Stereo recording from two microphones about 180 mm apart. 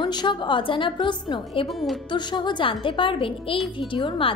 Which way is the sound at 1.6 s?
Centre (ahead or behind).